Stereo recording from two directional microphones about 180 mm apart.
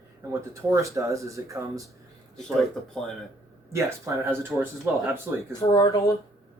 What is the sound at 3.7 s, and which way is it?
Speech, 15° right (ahead or behind).